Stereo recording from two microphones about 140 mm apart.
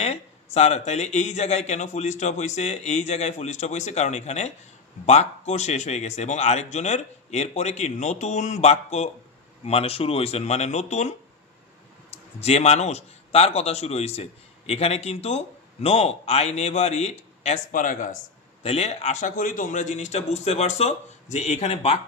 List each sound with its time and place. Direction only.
0.0 s a man's voice: 50° left (ahead or behind)
17.6 s speech: 70° left (ahead or behind)
18.6 s speech: 45° left (ahead or behind)